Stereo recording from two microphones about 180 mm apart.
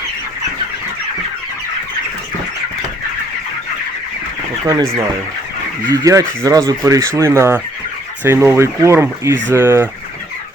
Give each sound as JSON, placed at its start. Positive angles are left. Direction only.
{"t": 4.8, "sound": "speech", "side_deg": -30}
{"t": 5.9, "sound": "speech", "side_deg": -20}